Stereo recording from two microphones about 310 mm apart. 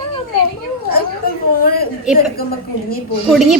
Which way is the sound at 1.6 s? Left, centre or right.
Left.